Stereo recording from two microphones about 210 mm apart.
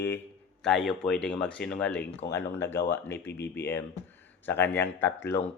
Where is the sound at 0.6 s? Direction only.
Centre (ahead or behind).